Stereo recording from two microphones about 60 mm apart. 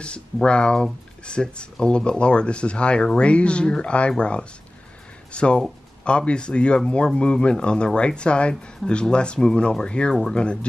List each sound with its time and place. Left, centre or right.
0.0 s speech: centre